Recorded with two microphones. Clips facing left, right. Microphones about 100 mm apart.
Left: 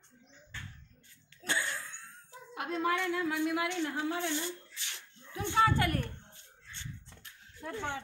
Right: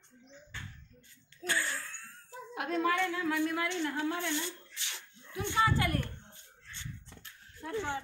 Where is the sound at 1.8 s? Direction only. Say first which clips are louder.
Right 1 dB; 20° left (ahead or behind).